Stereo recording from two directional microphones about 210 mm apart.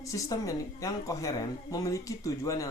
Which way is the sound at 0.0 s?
15° left (ahead or behind).